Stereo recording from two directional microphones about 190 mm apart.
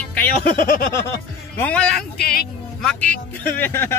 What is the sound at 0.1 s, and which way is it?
Speech, 50° left (ahead or behind).